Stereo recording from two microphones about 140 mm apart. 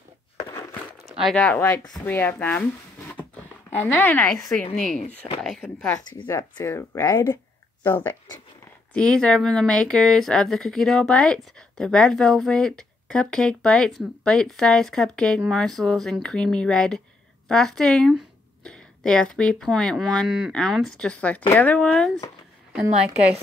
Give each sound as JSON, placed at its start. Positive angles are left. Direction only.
{"t": 0.5, "sound": "a sound", "side_deg": 20}
{"t": 1.3, "sound": "speech", "side_deg": 10}
{"t": 3.8, "sound": "speech", "side_deg": 10}
{"t": 4.7, "sound": "speech", "side_deg": 65}
{"t": 5.4, "sound": "speech", "side_deg": 0}
{"t": 6.0, "sound": "speech", "side_deg": 20}